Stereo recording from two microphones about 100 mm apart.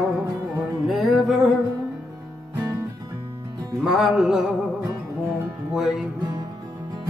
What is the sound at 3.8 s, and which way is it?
Music, 5° right (ahead or behind).